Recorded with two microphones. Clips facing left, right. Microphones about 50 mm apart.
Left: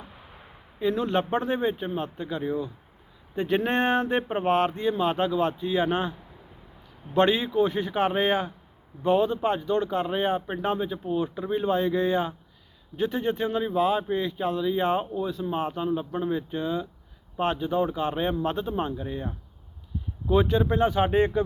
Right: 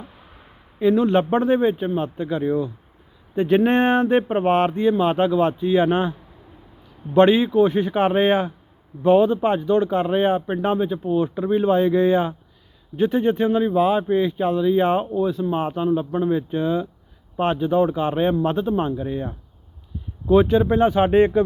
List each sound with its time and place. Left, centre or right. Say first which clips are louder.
0.8 s a man's voice: right 8 dB; centre
20.3 s speech: right 7 dB; centre